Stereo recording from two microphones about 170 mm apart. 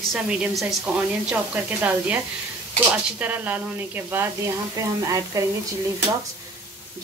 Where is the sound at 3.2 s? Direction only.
10° right (ahead or behind).